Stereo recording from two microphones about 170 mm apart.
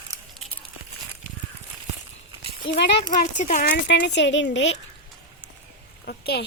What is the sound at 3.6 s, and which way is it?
Speech, 80° left.